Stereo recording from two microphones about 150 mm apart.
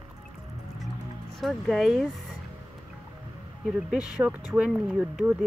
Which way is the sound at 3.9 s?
5° right (ahead or behind).